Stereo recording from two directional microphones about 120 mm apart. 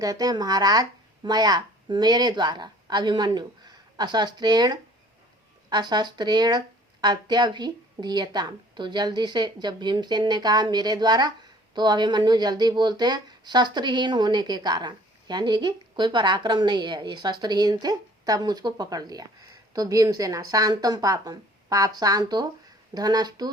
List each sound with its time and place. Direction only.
0.0 s a woman's voice: 30° right (ahead or behind)